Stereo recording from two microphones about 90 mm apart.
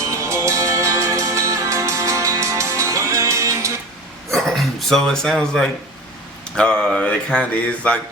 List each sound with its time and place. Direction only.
0.2 s music: 35° right (ahead or behind)
4.3 s a sound: centre (ahead or behind)
6.6 s speech: 10° left (ahead or behind)